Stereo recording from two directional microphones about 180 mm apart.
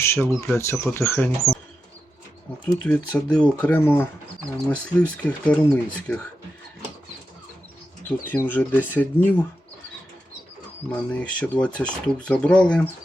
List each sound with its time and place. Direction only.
0.0 s speech: 15° left (ahead or behind)
2.8 s speech: 5° left (ahead or behind)
8.2 s speech: 10° left (ahead or behind)
10.9 s speech: 5° left (ahead or behind)